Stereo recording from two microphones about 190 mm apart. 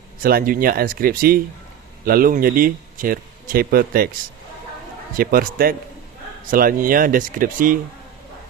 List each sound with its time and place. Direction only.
0.2 s speech: 50° right (ahead or behind)
5.1 s speech: 50° right (ahead or behind)